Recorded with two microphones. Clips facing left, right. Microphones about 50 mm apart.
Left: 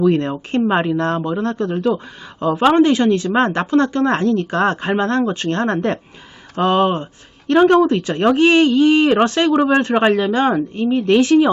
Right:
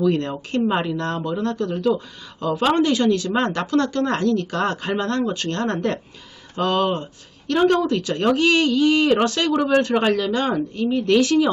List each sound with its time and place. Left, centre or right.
0.0 s a woman's voice: left